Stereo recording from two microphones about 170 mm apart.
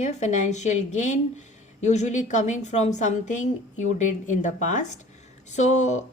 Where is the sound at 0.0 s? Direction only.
45° left (ahead or behind).